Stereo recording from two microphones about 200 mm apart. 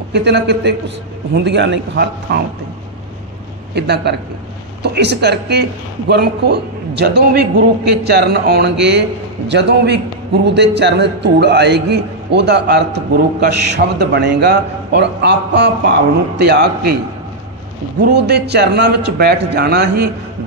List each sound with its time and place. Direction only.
0.1 s a man's voice: 60° right (ahead or behind)
3.7 s a man's voice: 55° right (ahead or behind)
17.9 s a man's voice: 55° right (ahead or behind)